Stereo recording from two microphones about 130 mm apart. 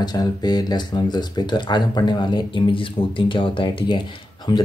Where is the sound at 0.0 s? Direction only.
30° left (ahead or behind).